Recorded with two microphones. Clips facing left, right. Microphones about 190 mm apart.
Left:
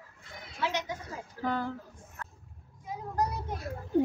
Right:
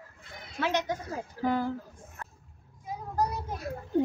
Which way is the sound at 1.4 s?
10° right (ahead or behind).